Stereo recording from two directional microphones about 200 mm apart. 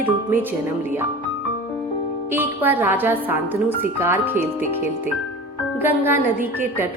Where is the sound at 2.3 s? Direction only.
10° right (ahead or behind).